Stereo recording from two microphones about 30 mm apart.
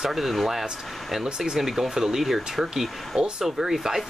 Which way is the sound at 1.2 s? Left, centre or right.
Right.